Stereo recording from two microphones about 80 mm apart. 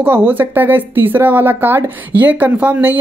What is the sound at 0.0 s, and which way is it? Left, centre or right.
Speech, right.